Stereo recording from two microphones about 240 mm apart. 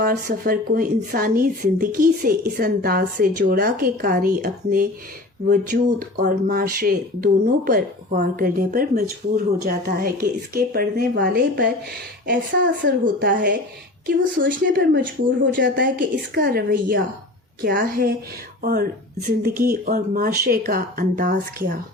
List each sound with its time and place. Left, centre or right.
0.0 s speech: right